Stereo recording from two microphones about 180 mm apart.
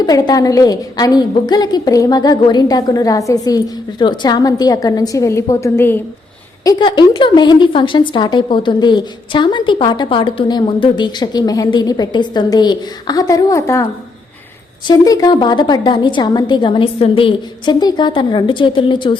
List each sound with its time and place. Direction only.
0.0 s speech: 20° left (ahead or behind)
6.7 s speech: 25° left (ahead or behind)
14.8 s speech: 20° left (ahead or behind)